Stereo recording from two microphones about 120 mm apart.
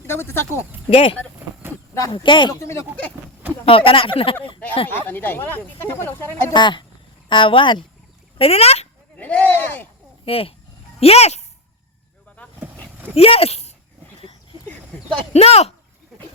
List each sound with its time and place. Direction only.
0.1 s speech: 20° left (ahead or behind)
0.9 s speech: 45° left (ahead or behind)
2.1 s speech: 40° left (ahead or behind)
2.6 s speech: 25° left (ahead or behind)
3.7 s speech: 50° left (ahead or behind)
4.9 s speech: 15° left (ahead or behind)
6.5 s speech: 40° left (ahead or behind)
8.4 s speech: 55° left (ahead or behind)
9.1 s a sound: 10° left (ahead or behind)
10.2 s speech: 55° left (ahead or behind)
13.1 s speech: 55° left (ahead or behind)
15.3 s speech: 60° left (ahead or behind)